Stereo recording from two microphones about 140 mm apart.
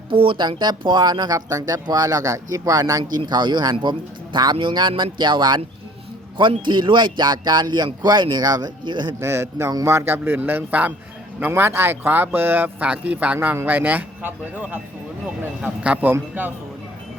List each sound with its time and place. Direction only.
0.1 s speech: 40° right (ahead or behind)
9.2 s speech: 20° right (ahead or behind)
15.8 s speech: 10° right (ahead or behind)